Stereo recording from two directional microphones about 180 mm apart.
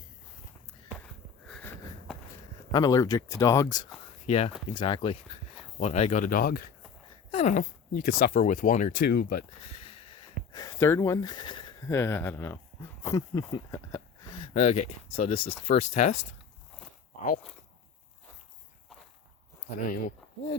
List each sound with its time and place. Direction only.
1.5 s sniff: 5° left (ahead or behind)
2.7 s speech: 20° left (ahead or behind)
4.3 s speech: 35° left (ahead or behind); by 6.7 s 55° left (ahead or behind)
7.3 s a sound: 35° left (ahead or behind)
7.5 s speech: 45° left (ahead or behind)
9.0 s speech: 60° left (ahead or behind)
9.6 s speech: 35° left (ahead or behind)
14.6 s speech: 40° left (ahead or behind)
19.8 s speech: 50° left (ahead or behind)